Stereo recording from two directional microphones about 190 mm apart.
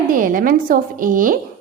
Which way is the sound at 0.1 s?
45° right (ahead or behind).